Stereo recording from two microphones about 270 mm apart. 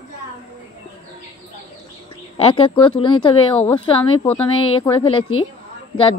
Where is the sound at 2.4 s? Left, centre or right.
Centre.